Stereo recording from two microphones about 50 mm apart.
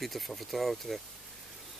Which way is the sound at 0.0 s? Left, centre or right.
Centre.